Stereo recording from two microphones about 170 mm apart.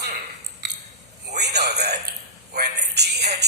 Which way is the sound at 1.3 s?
80° right.